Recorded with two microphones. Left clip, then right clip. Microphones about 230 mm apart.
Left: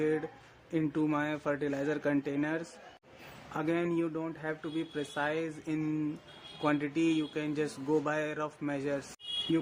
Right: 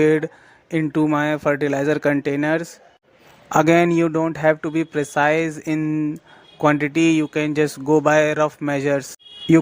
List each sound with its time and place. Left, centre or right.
0.0 s speech: right